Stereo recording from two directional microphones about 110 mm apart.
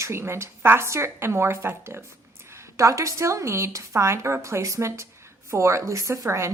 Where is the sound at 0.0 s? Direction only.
25° right (ahead or behind).